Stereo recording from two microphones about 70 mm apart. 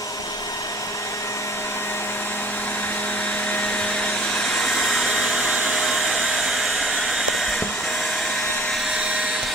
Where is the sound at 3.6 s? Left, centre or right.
Centre.